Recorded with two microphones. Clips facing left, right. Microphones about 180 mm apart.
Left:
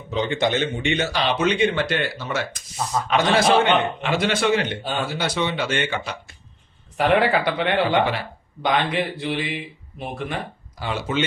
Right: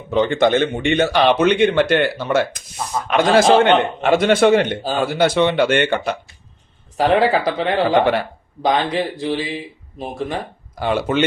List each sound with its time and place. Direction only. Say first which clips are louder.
0.1 s a man's voice: right 7 dB; 55° right (ahead or behind)
6.9 s speech: right 3 dB; 35° right (ahead or behind)
10.8 s a man's voice: right 7 dB; 55° right (ahead or behind)